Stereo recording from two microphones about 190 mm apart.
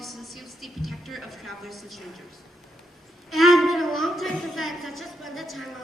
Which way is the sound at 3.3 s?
Centre (ahead or behind).